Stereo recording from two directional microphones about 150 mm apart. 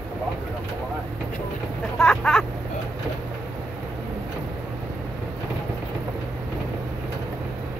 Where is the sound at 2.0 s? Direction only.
5° left (ahead or behind).